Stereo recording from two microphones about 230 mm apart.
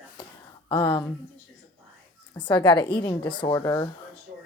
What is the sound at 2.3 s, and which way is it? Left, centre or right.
A woman's voice, centre.